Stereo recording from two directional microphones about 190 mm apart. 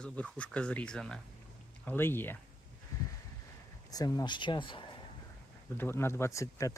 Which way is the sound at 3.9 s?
20° left (ahead or behind).